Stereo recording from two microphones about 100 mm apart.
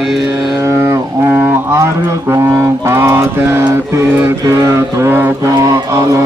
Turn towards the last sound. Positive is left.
turn(degrees=-20)  # may be behind; listen again after turning